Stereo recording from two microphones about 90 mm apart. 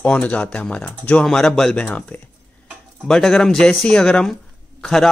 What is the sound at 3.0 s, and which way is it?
Speech, 5° left (ahead or behind).